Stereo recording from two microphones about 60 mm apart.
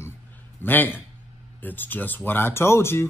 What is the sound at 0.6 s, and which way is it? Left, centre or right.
Speech, left.